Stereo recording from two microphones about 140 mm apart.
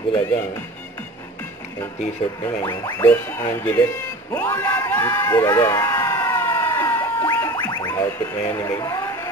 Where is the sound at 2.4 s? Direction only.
20° left (ahead or behind).